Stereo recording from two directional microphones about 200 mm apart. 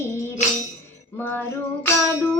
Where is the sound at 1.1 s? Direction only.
10° left (ahead or behind).